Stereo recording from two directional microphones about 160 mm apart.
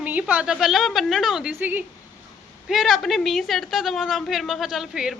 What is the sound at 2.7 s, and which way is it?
A woman's voice, centre (ahead or behind).